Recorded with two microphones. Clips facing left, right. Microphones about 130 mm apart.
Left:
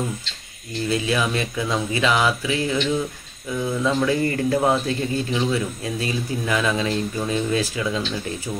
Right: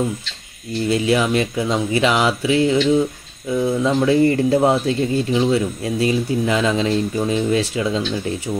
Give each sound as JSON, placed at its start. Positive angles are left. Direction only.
{"t": 0.8, "sound": "speech", "side_deg": -25}